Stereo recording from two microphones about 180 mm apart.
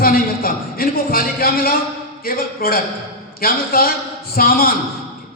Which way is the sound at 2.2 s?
55° left (ahead or behind).